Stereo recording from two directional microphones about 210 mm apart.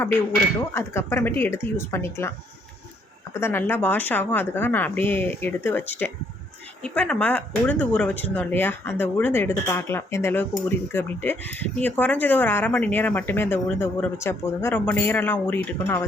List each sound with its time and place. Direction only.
0.7 s speech: 10° left (ahead or behind)
3.4 s speech: 10° left (ahead or behind)